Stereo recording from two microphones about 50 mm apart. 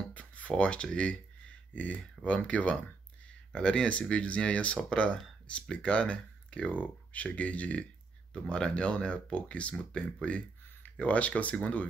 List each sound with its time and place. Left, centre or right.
0.1 s a sound: left
0.8 s speech: centre
1.7 s speech: left